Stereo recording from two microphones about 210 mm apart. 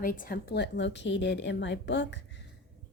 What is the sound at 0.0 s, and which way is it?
A woman's voice, 40° left (ahead or behind).